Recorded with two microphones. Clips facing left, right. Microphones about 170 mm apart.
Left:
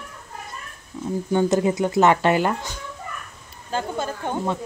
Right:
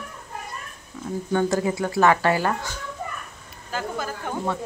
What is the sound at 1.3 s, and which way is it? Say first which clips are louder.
Speech: left 3 dB; 20° left (ahead or behind).